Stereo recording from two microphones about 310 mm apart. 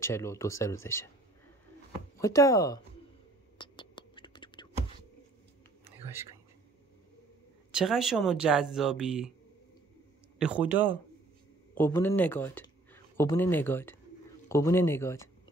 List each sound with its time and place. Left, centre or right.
0.0 s speech: centre
2.1 s speech: centre
3.5 s whispering: centre
7.7 s speech: centre
10.4 s speech: centre
11.7 s speech: centre